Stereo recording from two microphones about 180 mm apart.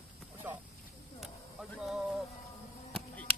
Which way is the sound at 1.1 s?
Centre (ahead or behind).